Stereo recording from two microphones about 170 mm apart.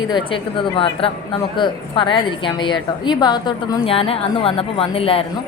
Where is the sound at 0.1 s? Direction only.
30° left (ahead or behind).